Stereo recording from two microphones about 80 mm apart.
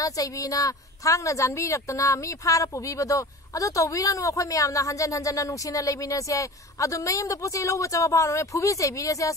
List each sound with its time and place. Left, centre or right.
0.0 s a woman's voice: left